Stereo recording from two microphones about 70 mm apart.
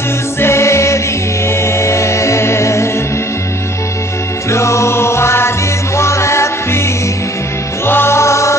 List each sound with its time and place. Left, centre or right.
0.4 s music: left
4.5 s music: left
7.8 s music: left